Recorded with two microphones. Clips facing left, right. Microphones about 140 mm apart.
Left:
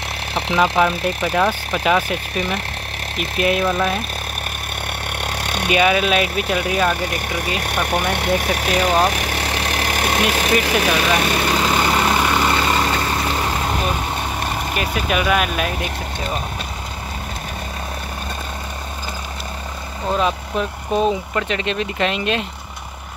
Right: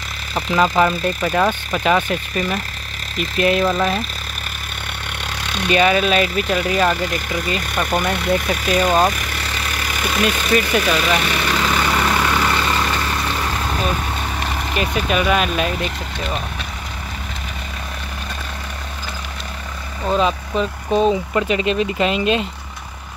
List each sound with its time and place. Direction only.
0.3 s vehicle: 70° left (ahead or behind)
0.6 s speech: 5° left (ahead or behind)
5.2 s a sound: 55° left (ahead or behind)
5.7 s speech: 5° left (ahead or behind)
7.1 s speech: 60° left (ahead or behind)
9.1 s vehicle: 65° left (ahead or behind)
11.2 s vehicle: 35° left (ahead or behind)
14.4 s speech: 10° left (ahead or behind)
20.1 s speech: centre (ahead or behind)
21.4 s speech: 5° right (ahead or behind)